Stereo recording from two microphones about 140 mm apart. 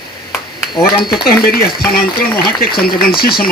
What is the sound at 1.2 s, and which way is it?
Speech, 90° left.